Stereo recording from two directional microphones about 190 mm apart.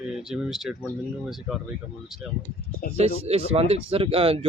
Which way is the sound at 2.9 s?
30° right (ahead or behind).